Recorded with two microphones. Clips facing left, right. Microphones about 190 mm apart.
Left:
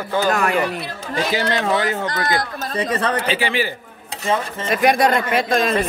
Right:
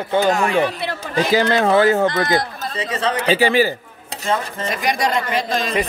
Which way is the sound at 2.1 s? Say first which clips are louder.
Right 3 dB; 25° right (ahead or behind).